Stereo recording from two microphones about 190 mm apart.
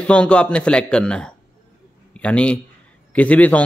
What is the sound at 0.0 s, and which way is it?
A man's voice, 5° left (ahead or behind).